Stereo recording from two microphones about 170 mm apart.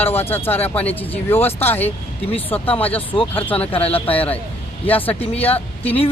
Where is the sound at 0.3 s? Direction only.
10° left (ahead or behind).